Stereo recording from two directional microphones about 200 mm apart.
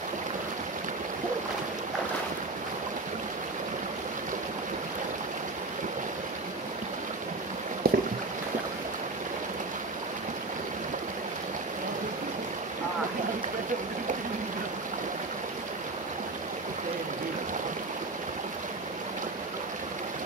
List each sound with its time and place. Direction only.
7.8 s boat: 50° right (ahead or behind)